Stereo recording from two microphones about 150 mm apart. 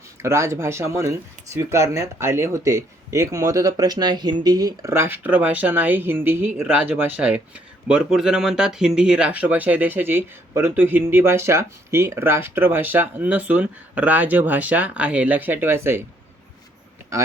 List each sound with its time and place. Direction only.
0.2 s speech: 20° right (ahead or behind)